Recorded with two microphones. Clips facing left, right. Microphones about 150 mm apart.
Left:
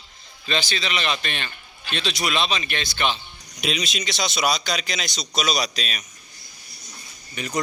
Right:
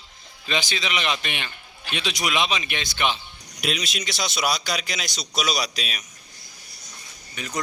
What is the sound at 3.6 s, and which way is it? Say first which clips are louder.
A man's voice: left 1 dB; 5° right (ahead or behind).